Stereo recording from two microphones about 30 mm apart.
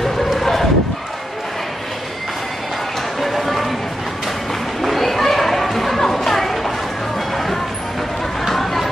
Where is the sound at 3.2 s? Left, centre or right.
Centre.